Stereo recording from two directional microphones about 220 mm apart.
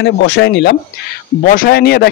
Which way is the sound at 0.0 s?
55° left (ahead or behind).